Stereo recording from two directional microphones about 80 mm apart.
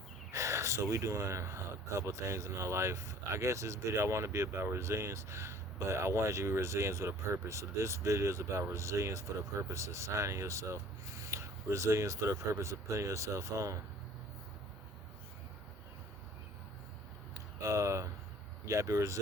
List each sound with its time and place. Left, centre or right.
0.3 s speech: right
17.6 s speech: right